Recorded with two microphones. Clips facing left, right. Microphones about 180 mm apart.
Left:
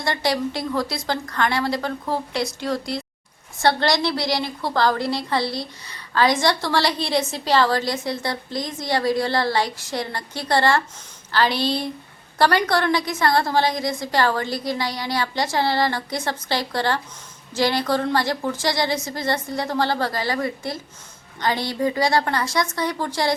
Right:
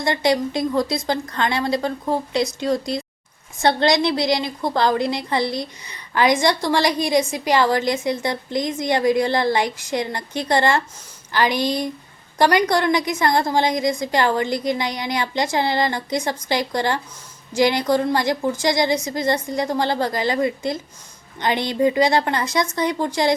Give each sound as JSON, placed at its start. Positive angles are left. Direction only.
{"t": 0.0, "sound": "a woman's voice", "side_deg": -20}